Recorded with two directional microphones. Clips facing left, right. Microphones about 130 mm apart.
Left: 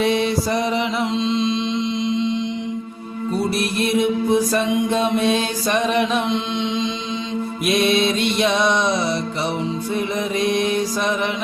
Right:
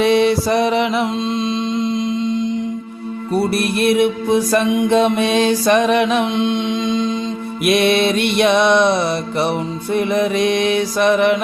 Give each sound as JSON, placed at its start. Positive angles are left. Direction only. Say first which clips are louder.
{"t": 0.0, "sound": "music", "louder": "right 5 dB", "side_deg": -70}
{"t": 3.3, "sound": "mantra", "louder": "right 4 dB", "side_deg": -65}
{"t": 4.5, "sound": "music", "louder": "right 5 dB", "side_deg": -70}
{"t": 7.6, "sound": "mantra", "louder": "right 4 dB", "side_deg": -70}
{"t": 9.9, "sound": "music", "louder": "right 9 dB", "side_deg": -75}